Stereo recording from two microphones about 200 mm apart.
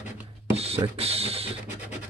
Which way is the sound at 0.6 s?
30° right (ahead or behind).